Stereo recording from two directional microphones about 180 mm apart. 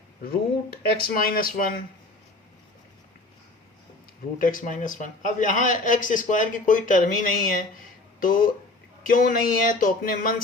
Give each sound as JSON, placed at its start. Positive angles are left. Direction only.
{"t": 0.8, "sound": "a man's voice", "side_deg": 55}
{"t": 4.4, "sound": "a man's voice", "side_deg": 50}